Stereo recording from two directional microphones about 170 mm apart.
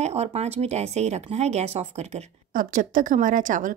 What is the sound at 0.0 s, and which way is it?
Speech, 40° right (ahead or behind).